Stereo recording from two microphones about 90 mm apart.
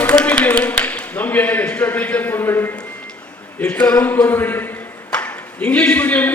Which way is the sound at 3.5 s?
15° left (ahead or behind).